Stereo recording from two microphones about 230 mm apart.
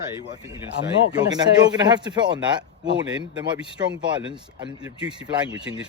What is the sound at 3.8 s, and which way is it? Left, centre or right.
Speech, centre.